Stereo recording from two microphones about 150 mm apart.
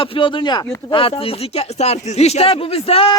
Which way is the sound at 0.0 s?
35° left (ahead or behind).